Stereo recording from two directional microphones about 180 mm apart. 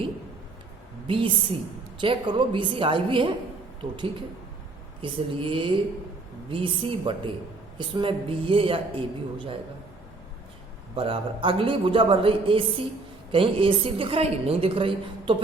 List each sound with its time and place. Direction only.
1.0 s a woman's voice: 30° right (ahead or behind)
5.0 s speech: 30° right (ahead or behind)
10.9 s a woman's voice: 30° right (ahead or behind)